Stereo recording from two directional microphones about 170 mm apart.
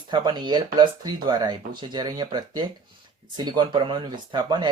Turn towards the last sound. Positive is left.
turn(degrees=-25)  # may be behind; listen again after turning